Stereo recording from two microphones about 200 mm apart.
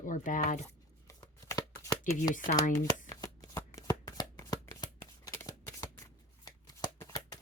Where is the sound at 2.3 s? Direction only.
40° left (ahead or behind).